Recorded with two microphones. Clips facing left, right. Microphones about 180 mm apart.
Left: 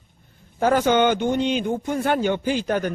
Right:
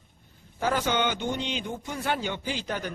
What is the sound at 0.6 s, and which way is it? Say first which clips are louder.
A man's voice: left 8 dB; 50° left (ahead or behind).